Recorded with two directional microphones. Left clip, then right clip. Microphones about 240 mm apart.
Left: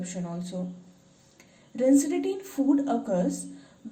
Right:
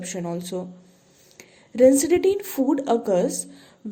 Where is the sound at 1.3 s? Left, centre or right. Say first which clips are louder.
Right 11 dB; right.